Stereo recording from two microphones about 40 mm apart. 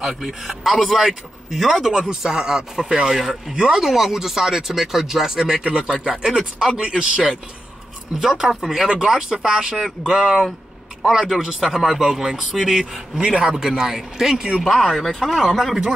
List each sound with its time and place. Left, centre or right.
0.3 s speech: centre
3.5 s speech: centre
3.8 s speech: centre
5.6 s speech: right
6.1 s speech: centre
6.8 s speech: right
8.2 s speech: centre
14.6 s speech: centre